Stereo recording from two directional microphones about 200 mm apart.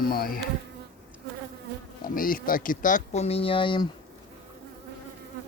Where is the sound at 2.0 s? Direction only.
45° left (ahead or behind); by 3.8 s 25° left (ahead or behind).